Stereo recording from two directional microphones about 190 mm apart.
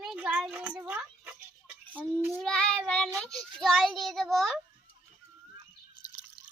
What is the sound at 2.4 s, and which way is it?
Child singing, 5° left (ahead or behind).